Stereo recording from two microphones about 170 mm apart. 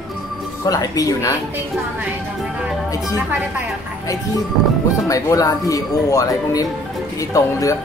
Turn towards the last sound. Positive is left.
turn(degrees=20)  # may be behind; listen again after turning